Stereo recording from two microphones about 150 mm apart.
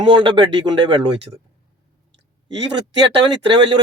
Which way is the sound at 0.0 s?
35° right (ahead or behind).